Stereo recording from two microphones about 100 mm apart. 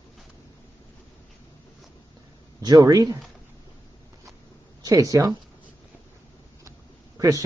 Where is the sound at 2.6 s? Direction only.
40° right (ahead or behind).